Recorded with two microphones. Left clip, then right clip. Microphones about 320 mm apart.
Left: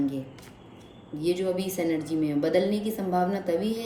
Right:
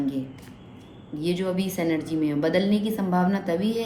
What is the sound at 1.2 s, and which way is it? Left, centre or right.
A woman's voice, centre.